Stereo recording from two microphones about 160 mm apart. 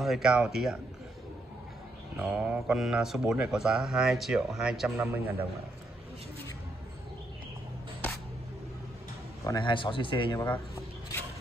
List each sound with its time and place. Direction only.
0.0 s speech: centre (ahead or behind)
2.1 s a man's voice: 5° right (ahead or behind)
9.6 s speech: 30° left (ahead or behind)